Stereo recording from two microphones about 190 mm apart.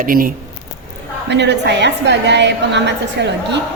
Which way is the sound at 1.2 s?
65° right (ahead or behind).